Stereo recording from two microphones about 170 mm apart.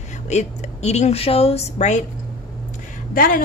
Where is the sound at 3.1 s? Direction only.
55° left (ahead or behind).